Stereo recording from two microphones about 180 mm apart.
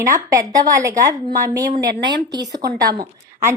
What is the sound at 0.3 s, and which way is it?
A woman's voice, 20° right (ahead or behind).